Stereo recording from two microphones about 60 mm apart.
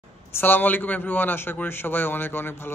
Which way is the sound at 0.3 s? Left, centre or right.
Left.